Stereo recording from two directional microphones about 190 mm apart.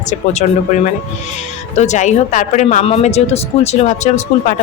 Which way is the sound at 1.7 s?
40° left (ahead or behind).